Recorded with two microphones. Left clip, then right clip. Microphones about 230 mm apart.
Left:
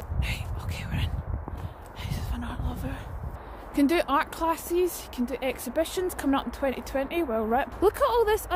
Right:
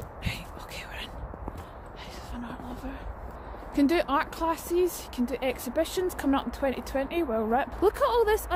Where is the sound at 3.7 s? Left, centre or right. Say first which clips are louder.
Left 1 dB; centre.